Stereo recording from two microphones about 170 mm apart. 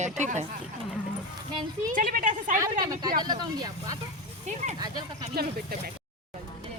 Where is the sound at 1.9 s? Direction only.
50° right (ahead or behind).